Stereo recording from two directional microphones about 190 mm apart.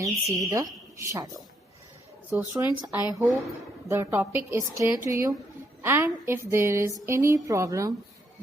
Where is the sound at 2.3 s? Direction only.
10° right (ahead or behind).